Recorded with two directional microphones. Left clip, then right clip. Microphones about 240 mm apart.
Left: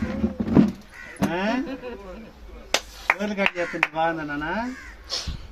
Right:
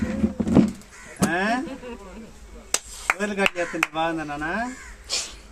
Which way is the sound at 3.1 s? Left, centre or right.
Right.